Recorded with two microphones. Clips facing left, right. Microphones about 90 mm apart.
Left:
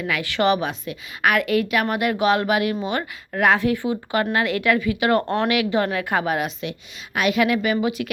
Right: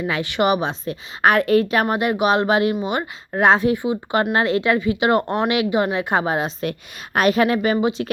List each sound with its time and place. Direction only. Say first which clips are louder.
0.0 s speech: right 1 dB; 25° right (ahead or behind)
0.7 s speech: right 3 dB; 35° right (ahead or behind)
6.6 s a woman's voice: right 5 dB; 45° right (ahead or behind); by 8.1 s 30° right (ahead or behind)